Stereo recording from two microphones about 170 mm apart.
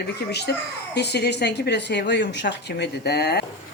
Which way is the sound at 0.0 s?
75° left (ahead or behind).